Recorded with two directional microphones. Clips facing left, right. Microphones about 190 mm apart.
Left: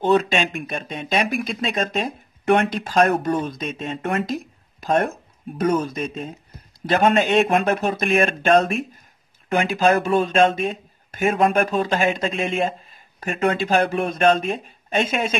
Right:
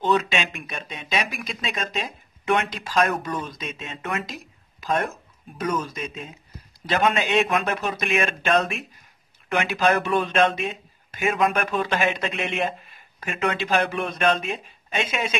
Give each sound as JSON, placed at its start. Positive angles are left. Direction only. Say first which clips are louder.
{"t": 0.0, "sound": "speech", "louder": "left 4 dB", "side_deg": 50}
{"t": 5.7, "sound": "speech", "louder": "left 5 dB", "side_deg": 50}